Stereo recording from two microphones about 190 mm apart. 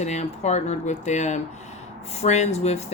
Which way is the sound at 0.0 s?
35° left (ahead or behind).